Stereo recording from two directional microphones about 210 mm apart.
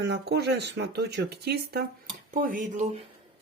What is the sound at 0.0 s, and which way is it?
Speech, 50° right (ahead or behind).